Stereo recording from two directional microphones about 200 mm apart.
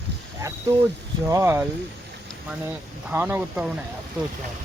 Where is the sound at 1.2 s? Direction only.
15° right (ahead or behind).